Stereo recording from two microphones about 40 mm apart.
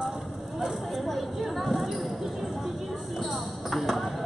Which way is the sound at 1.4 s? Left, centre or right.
Centre.